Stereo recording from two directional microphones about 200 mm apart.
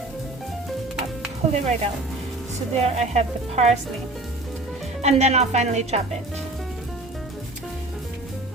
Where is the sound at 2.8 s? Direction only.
35° right (ahead or behind).